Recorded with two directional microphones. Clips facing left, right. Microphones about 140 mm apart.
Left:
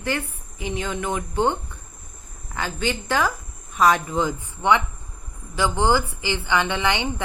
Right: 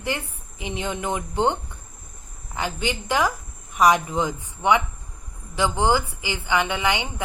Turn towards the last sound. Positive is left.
turn(degrees=-15)  # may be behind; listen again after turning